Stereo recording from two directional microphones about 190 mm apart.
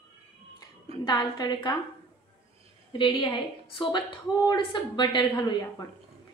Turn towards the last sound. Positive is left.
turn(degrees=25)  # may be behind; listen again after turning